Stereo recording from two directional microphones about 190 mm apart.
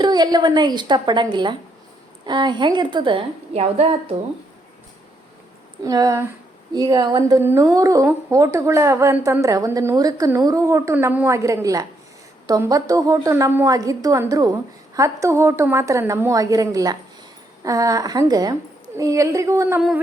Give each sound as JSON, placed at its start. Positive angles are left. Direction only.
{"t": 0.0, "sound": "a woman's voice", "side_deg": -20}
{"t": 5.8, "sound": "a woman's voice", "side_deg": -20}